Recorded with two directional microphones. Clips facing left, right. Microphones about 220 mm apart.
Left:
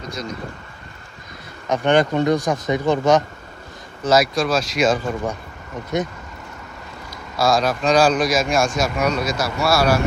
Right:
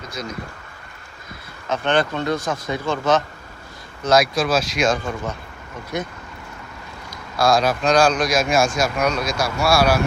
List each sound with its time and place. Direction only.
0.0 s speech: centre (ahead or behind)
1.7 s speech: 15° left (ahead or behind)
4.0 s speech: 5° left (ahead or behind)
5.9 s speech: 20° left (ahead or behind)
7.1 s speech: centre (ahead or behind)